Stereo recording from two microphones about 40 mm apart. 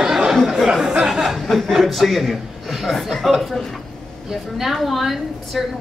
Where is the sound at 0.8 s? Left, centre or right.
Centre.